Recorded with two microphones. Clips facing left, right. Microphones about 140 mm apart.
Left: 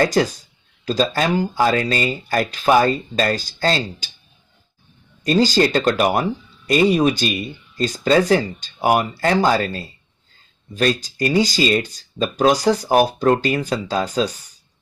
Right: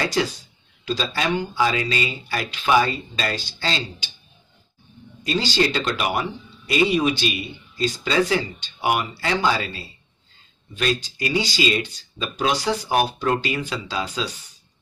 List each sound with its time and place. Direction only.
0.0 s speech: 45° left (ahead or behind)
5.2 s speech: 45° left (ahead or behind)